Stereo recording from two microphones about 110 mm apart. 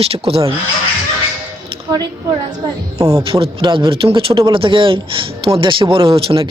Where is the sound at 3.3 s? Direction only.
50° right (ahead or behind).